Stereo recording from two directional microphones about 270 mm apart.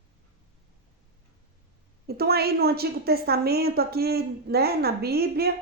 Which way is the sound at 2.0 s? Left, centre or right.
Right.